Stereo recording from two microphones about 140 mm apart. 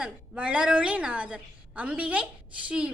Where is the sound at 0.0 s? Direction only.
5° right (ahead or behind).